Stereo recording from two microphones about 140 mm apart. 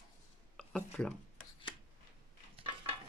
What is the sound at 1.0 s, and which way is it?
Speech, 5° left (ahead or behind).